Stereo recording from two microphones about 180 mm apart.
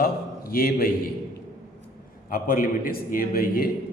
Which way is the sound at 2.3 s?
50° left (ahead or behind).